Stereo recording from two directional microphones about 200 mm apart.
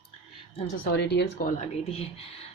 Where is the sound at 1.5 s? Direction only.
30° left (ahead or behind).